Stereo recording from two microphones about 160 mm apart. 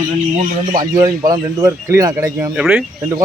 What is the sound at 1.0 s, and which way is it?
A man's voice, 25° right (ahead or behind).